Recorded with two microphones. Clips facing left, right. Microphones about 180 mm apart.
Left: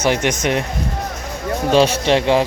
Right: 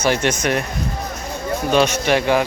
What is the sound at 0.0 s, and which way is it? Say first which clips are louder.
Speech: left 1 dB; 20° left (ahead or behind).